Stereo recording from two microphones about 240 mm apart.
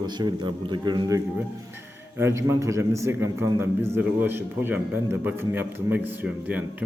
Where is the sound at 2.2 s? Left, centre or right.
Centre.